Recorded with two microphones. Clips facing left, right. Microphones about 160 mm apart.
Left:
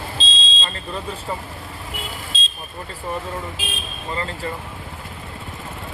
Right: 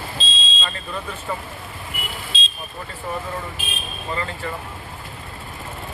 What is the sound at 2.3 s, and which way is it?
Vehicle, 45° left (ahead or behind).